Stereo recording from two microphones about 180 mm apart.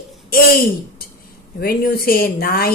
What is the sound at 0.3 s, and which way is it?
A woman's voice, 60° left (ahead or behind).